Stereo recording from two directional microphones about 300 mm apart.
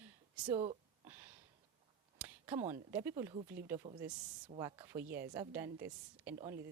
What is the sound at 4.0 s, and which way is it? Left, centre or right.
Speech, centre.